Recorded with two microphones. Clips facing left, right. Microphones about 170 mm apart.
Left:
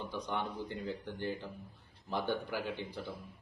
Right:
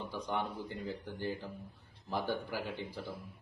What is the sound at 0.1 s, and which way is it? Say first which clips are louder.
A man's voice: right 2 dB; centre (ahead or behind).